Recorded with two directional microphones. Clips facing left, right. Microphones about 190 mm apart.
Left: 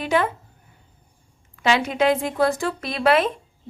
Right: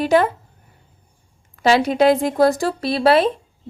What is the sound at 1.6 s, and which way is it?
A woman's voice, 35° right (ahead or behind).